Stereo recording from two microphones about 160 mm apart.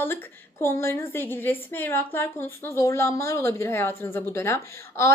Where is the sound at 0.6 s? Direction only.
15° left (ahead or behind).